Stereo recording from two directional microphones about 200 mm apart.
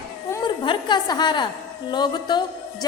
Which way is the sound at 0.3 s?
20° left (ahead or behind).